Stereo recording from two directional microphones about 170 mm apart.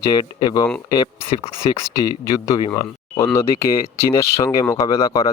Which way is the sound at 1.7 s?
20° left (ahead or behind).